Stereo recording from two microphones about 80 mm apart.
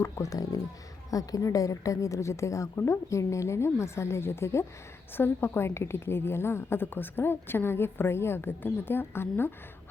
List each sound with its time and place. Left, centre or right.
0.0 s a woman's voice: left